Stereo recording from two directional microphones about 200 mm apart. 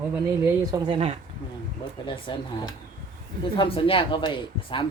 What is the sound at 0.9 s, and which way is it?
Speech, 30° right (ahead or behind).